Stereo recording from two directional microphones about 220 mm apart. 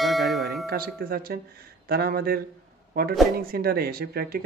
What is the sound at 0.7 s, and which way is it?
A man's voice, 40° right (ahead or behind).